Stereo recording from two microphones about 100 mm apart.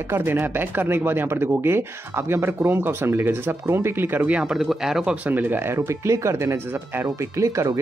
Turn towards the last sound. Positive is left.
turn(degrees=-30)  # may be behind; listen again after turning